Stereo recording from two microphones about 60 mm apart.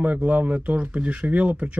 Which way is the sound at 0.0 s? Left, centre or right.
Right.